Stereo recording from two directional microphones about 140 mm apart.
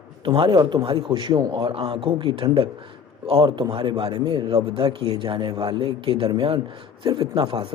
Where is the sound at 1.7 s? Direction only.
40° right (ahead or behind).